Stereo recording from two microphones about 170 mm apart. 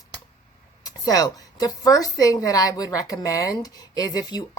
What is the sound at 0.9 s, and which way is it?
A woman's voice, 20° left (ahead or behind).